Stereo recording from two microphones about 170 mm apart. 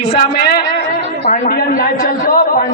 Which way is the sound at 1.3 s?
55° left (ahead or behind).